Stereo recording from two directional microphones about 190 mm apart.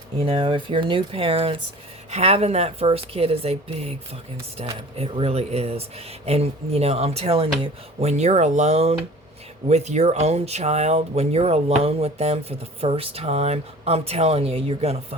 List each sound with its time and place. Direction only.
0.2 s speech: 30° right (ahead or behind)
4.9 s speech: 30° right (ahead or behind)